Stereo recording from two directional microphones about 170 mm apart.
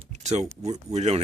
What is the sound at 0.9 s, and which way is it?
Speech, 40° right (ahead or behind).